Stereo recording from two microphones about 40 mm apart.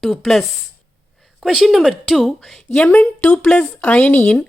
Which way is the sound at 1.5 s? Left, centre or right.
Centre.